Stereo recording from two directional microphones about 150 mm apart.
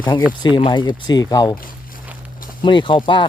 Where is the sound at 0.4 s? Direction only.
30° left (ahead or behind).